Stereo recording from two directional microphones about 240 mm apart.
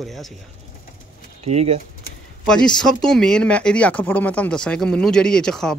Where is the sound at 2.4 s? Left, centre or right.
Centre.